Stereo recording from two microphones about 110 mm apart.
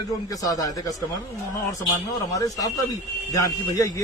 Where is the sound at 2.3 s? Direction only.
30° left (ahead or behind).